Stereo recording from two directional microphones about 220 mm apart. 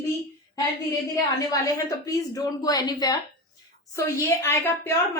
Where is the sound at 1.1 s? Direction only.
15° left (ahead or behind).